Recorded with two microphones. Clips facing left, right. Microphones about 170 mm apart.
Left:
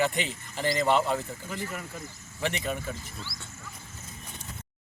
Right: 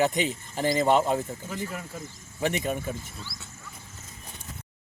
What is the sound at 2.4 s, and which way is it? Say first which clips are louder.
Speech: right 3 dB; 45° right (ahead or behind).